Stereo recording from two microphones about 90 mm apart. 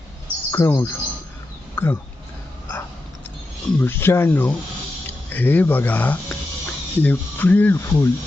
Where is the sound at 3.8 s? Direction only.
25° left (ahead or behind).